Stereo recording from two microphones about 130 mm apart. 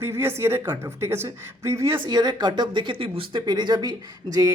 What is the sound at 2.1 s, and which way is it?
Speech, 30° right (ahead or behind).